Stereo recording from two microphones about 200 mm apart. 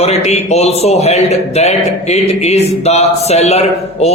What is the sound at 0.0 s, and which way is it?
A man's voice, 30° left (ahead or behind).